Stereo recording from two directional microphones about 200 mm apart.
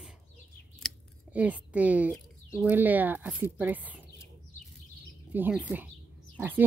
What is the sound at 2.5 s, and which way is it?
Speech, 5° right (ahead or behind).